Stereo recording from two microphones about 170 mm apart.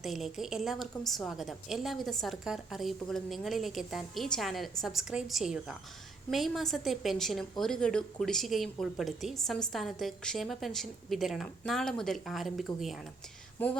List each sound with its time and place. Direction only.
0.0 s a woman's voice: centre (ahead or behind)
13.6 s speech: 10° left (ahead or behind)